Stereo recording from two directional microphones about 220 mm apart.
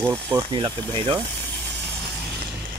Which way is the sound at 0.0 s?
10° right (ahead or behind).